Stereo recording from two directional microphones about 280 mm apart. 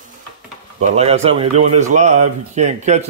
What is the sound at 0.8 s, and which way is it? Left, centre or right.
Speech, right.